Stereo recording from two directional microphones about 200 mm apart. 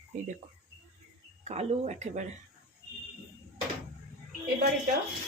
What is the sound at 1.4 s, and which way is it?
Speech, 35° right (ahead or behind).